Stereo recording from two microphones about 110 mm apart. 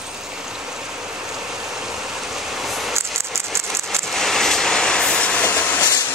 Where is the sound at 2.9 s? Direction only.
25° right (ahead or behind).